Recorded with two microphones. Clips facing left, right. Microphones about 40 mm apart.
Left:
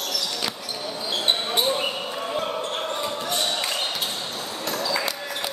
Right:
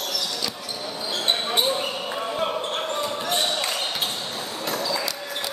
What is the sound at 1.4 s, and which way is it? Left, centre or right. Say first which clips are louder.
Basketball bounce: even; centre.